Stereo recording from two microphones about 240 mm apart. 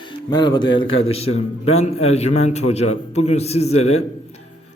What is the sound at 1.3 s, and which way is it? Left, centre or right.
Speech, left.